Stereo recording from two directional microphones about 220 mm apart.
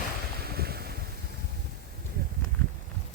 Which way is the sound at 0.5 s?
45° right (ahead or behind).